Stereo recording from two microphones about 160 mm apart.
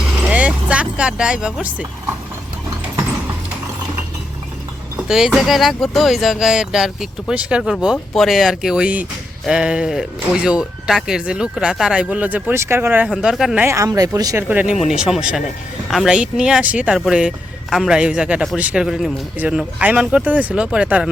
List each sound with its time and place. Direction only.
0.3 s speech: 5° right (ahead or behind)
4.9 s speech: 5° right (ahead or behind)
13.1 s speech: centre (ahead or behind)
13.7 s speech: 20° right (ahead or behind)
14.4 s speech: 10° right (ahead or behind)